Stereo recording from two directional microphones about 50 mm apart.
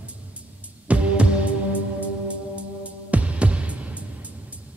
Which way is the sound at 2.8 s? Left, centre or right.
Right.